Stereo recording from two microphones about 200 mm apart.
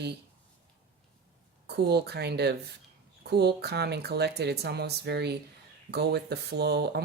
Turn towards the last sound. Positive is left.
turn(degrees=-55)  # may be behind; listen again after turning